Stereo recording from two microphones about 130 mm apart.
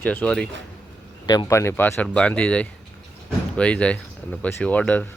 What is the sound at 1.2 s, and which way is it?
Speech, 30° left (ahead or behind).